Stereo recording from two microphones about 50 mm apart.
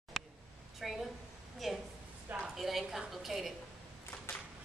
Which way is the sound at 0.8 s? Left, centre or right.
Centre.